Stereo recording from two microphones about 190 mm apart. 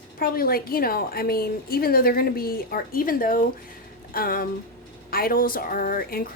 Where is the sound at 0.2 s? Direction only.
50° left (ahead or behind).